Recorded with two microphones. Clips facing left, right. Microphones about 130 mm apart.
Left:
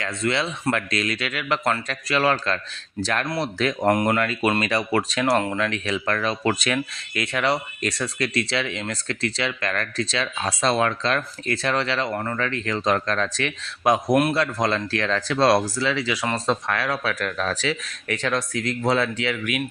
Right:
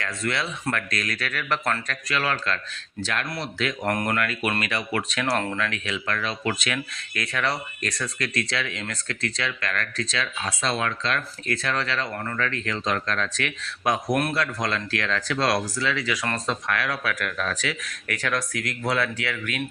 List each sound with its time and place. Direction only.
0.0 s speech: 20° left (ahead or behind)
1.9 s speech: 30° left (ahead or behind)
3.8 s speech: 15° left (ahead or behind)
4.2 s speech: 30° left (ahead or behind)
5.3 s speech: 10° left (ahead or behind)
5.5 s speech: 30° left (ahead or behind)
6.7 s speech: 20° left (ahead or behind)
14.1 s speech: 10° left (ahead or behind)
14.3 s speech: 25° left (ahead or behind)